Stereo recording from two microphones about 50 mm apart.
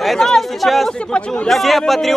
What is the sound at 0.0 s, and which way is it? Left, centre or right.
Speech, centre.